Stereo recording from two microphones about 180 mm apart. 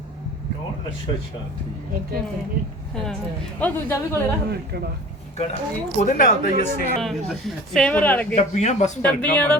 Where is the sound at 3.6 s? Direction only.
10° left (ahead or behind).